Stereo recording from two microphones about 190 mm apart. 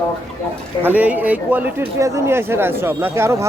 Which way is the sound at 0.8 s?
10° right (ahead or behind).